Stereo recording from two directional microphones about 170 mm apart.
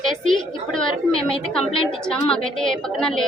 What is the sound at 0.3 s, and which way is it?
Speech, 5° left (ahead or behind).